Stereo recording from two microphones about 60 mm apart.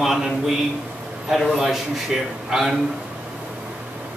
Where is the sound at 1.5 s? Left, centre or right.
Centre.